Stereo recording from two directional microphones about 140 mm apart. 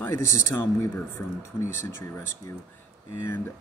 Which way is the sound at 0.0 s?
15° left (ahead or behind).